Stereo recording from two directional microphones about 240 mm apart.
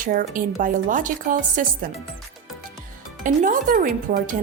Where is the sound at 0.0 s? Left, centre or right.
Right.